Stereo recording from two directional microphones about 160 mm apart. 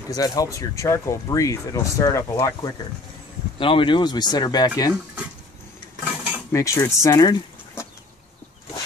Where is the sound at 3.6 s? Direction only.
30° left (ahead or behind).